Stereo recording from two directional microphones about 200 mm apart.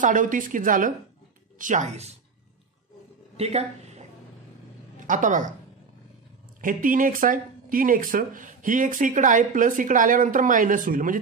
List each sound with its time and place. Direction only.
0.0 s speech: 40° right (ahead or behind)
3.3 s speech: 30° right (ahead or behind)
5.0 s speech: 40° right (ahead or behind)
6.6 s speech: 40° right (ahead or behind)